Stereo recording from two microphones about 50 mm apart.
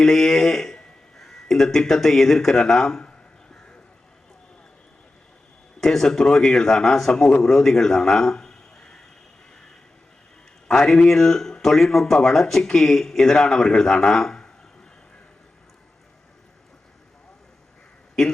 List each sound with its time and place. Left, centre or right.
0.0 s a man's voice: centre
3.0 s a sound: centre
5.8 s a man's voice: centre
10.7 s a man's voice: centre